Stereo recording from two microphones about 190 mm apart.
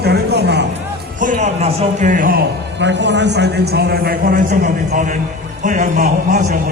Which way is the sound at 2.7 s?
70° right (ahead or behind).